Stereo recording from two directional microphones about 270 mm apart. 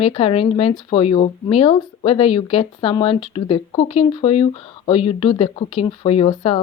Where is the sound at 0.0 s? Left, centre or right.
Left.